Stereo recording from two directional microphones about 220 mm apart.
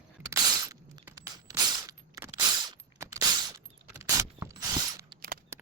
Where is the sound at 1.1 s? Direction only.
15° right (ahead or behind).